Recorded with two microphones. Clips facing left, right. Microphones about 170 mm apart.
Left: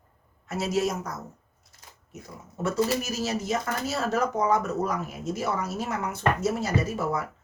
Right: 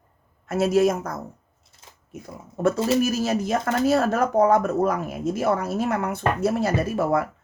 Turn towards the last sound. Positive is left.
turn(degrees=-60)  # may be behind; listen again after turning